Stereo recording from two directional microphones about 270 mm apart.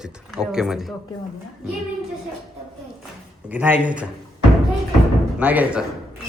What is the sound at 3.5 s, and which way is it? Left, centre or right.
Speech, centre.